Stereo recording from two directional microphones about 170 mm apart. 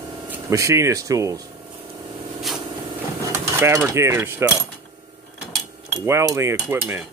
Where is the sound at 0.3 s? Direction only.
20° right (ahead or behind).